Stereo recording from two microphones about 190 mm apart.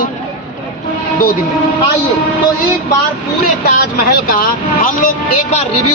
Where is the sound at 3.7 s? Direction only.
50° left (ahead or behind).